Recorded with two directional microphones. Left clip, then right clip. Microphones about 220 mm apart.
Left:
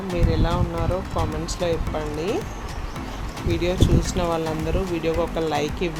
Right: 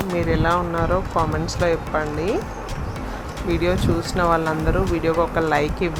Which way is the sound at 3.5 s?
10° right (ahead or behind).